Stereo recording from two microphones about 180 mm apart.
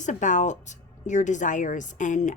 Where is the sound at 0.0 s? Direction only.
45° left (ahead or behind).